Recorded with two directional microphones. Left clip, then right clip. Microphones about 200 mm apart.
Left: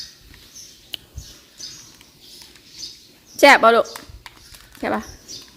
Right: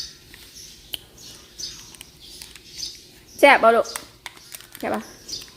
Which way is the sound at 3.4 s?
20° left (ahead or behind).